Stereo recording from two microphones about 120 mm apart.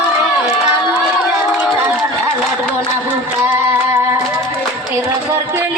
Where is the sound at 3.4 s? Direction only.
20° right (ahead or behind).